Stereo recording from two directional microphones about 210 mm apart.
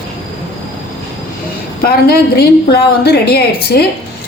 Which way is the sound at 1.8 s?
50° left (ahead or behind).